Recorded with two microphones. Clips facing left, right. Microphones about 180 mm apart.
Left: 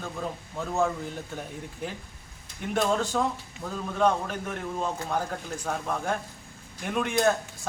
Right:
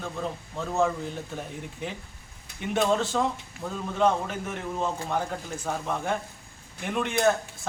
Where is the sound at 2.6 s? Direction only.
Centre (ahead or behind).